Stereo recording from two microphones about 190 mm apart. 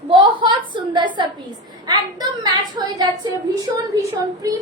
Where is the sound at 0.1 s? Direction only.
25° right (ahead or behind).